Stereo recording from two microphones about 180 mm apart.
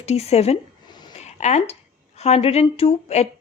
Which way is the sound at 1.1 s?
40° left (ahead or behind).